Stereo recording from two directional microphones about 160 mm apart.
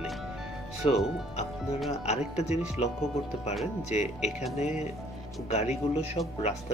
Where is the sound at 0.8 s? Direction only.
35° left (ahead or behind).